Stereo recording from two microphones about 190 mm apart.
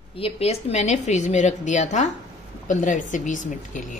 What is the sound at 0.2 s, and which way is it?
A woman's voice, 35° left (ahead or behind).